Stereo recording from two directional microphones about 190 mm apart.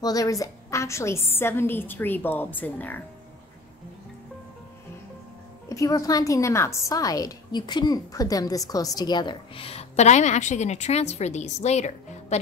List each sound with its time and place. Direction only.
0.0 s a woman's voice: 20° left (ahead or behind)
5.7 s a woman's voice: 20° left (ahead or behind); by 12.4 s 35° left (ahead or behind)